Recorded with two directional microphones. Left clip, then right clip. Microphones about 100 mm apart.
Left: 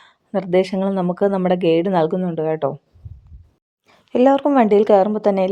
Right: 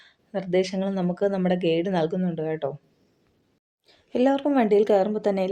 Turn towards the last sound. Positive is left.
turn(degrees=45)  # may be behind; listen again after turning